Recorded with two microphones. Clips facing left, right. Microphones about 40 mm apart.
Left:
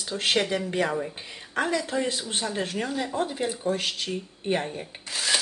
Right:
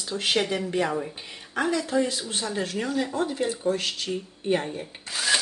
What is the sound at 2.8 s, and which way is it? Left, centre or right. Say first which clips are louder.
Speech: right 2 dB; centre.